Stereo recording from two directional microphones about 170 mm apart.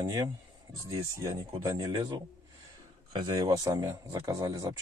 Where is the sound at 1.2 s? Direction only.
20° right (ahead or behind).